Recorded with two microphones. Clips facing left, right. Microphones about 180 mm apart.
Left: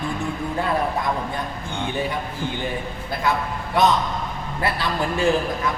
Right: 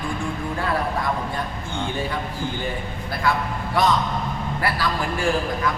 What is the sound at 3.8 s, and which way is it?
A man's voice, 20° left (ahead or behind).